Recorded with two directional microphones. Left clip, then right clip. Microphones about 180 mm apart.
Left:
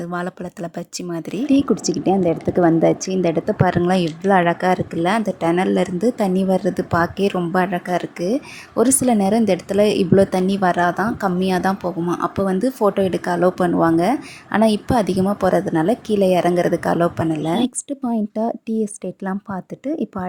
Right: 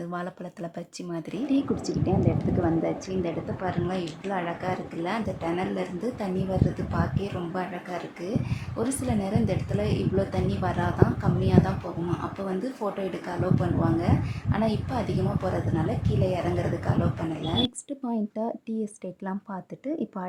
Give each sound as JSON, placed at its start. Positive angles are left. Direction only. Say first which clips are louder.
{"t": 0.1, "sound": "a woman's voice", "louder": "left 8 dB", "side_deg": 35}
{"t": 17.8, "sound": "speech", "louder": "left 8 dB", "side_deg": 35}